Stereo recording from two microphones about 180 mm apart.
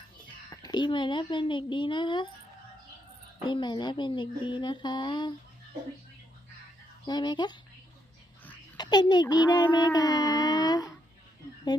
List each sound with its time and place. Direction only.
0.5 s a child's voice: 20° left (ahead or behind)
3.4 s a child's voice: 25° left (ahead or behind)
7.1 s a child's voice: 25° left (ahead or behind)
8.8 s a child's voice: 25° left (ahead or behind)